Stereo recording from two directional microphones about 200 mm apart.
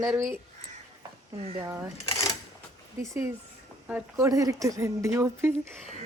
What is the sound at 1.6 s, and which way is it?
Speech, 15° right (ahead or behind).